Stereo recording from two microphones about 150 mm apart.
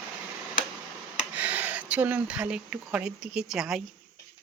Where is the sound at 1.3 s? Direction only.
10° right (ahead or behind).